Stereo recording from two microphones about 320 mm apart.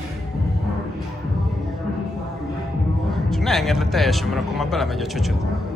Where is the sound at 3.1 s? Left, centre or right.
Centre.